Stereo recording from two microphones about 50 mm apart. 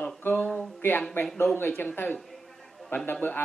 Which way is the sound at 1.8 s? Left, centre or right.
Left.